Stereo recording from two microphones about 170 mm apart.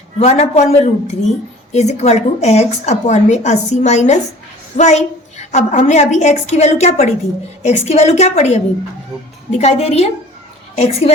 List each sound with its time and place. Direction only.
0.2 s a woman's voice: 40° left (ahead or behind)